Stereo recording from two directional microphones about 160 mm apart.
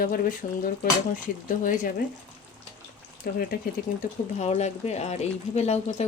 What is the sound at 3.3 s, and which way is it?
Speech, 65° left (ahead or behind).